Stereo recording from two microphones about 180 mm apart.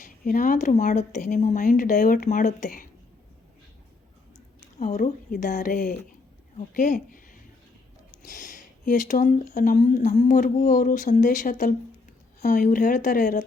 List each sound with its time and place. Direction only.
0.0 s speech: 50° left (ahead or behind)
4.8 s speech: 40° left (ahead or behind)